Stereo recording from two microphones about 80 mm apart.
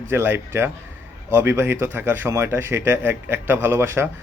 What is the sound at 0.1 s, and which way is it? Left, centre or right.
Speech, right.